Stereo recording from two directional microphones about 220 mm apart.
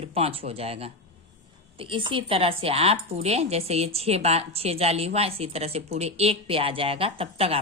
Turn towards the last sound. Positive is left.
turn(degrees=-25)  # may be behind; listen again after turning